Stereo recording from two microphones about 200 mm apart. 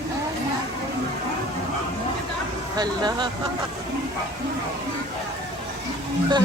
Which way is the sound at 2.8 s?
20° right (ahead or behind).